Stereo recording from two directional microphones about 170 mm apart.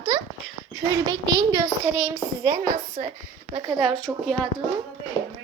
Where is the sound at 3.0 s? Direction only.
50° right (ahead or behind).